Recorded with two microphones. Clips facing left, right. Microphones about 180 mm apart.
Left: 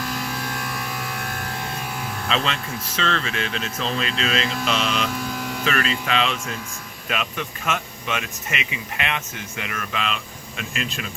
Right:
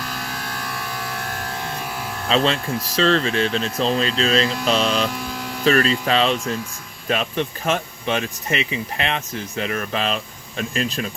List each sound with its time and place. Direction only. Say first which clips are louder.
2.3 s speech: right 7 dB; 35° right (ahead or behind)